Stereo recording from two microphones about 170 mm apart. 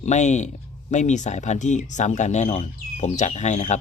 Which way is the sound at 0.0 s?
45° left (ahead or behind).